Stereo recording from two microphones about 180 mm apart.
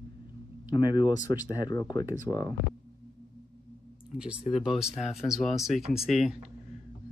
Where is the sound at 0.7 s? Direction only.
25° left (ahead or behind).